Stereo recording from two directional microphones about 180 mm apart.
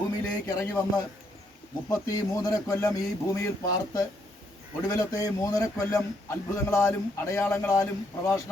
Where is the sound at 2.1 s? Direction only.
20° left (ahead or behind).